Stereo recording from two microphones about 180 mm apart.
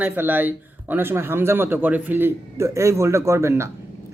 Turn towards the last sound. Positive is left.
turn(degrees=-15)  # may be behind; listen again after turning